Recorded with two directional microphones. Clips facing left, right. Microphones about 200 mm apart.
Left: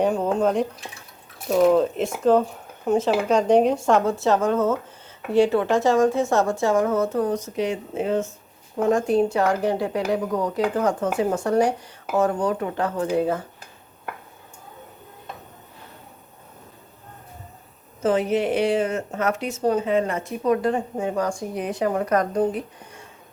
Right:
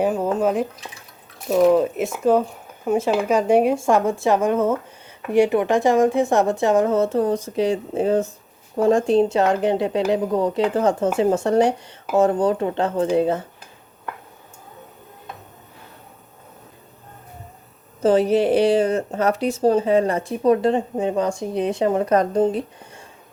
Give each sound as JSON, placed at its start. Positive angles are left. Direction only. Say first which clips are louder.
{"t": 0.0, "sound": "speech", "louder": "right 1 dB", "side_deg": -5}
{"t": 18.0, "sound": "speech", "louder": "right 4 dB", "side_deg": -35}